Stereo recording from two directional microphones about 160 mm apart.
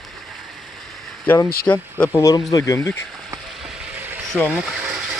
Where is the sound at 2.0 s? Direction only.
20° left (ahead or behind).